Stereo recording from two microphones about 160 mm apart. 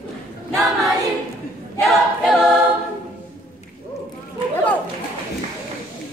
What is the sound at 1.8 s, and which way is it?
A capella, centre (ahead or behind).